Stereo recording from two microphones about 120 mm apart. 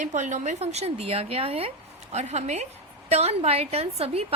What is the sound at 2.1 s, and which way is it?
A woman's voice, 65° right (ahead or behind).